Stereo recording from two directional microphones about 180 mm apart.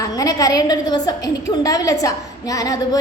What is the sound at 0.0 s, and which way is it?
A woman's voice, 20° left (ahead or behind).